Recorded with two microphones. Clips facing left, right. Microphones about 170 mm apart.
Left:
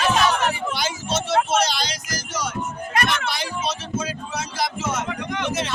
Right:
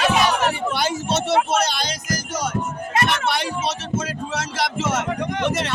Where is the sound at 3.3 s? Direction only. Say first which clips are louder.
Right 3 dB; 65° right (ahead or behind).